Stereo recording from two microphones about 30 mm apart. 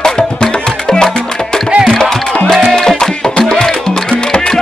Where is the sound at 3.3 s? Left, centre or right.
Left.